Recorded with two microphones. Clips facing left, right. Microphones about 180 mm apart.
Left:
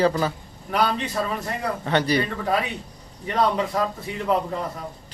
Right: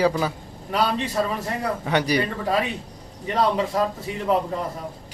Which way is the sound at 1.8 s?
10° right (ahead or behind).